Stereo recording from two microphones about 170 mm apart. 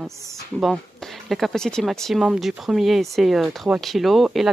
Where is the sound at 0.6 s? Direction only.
Centre (ahead or behind).